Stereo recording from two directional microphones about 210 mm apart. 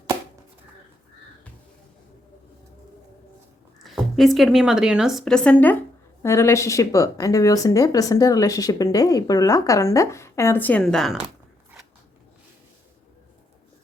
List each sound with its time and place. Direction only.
3.8 s a woman's voice: centre (ahead or behind)